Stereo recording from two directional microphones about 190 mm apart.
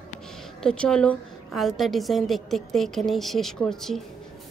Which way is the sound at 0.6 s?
5° left (ahead or behind).